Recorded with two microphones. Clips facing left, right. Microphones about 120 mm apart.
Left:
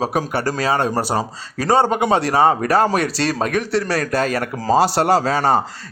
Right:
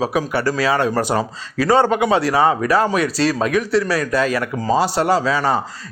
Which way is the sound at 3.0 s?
60° left (ahead or behind).